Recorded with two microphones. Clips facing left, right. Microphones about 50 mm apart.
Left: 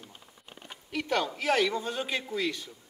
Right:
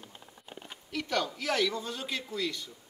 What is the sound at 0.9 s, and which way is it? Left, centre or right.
A man's voice, left.